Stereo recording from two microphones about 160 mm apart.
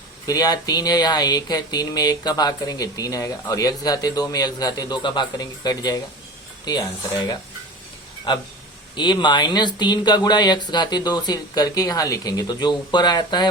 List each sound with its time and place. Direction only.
0.3 s speech: 25° left (ahead or behind)